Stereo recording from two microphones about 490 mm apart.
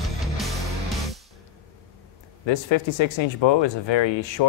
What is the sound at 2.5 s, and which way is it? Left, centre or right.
Speech, left.